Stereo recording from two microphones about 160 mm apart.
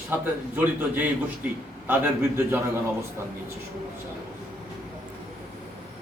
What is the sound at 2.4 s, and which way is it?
Speech, 15° right (ahead or behind).